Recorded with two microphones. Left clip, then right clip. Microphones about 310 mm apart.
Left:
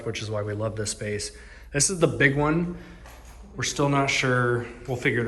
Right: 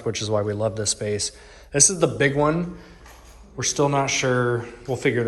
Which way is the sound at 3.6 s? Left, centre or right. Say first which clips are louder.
Right 3 dB; centre.